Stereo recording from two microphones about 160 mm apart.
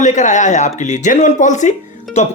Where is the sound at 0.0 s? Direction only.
50° left (ahead or behind).